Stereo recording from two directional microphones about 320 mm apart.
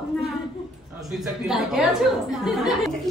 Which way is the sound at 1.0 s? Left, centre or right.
Centre.